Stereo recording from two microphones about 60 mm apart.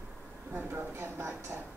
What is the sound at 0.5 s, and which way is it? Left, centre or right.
Speech, right.